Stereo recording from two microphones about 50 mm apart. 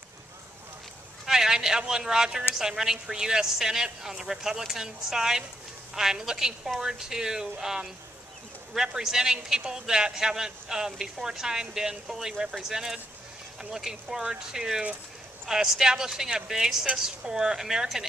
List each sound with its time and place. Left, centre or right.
1.2 s a man's voice: centre